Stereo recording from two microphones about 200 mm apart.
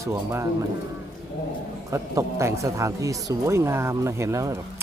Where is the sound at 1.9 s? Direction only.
15° right (ahead or behind).